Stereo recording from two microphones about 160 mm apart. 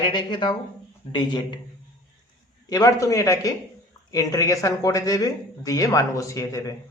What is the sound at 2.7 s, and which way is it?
A man's voice, 20° left (ahead or behind).